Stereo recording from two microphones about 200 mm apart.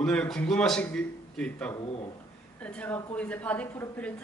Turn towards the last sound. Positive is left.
turn(degrees=5)  # may be behind; listen again after turning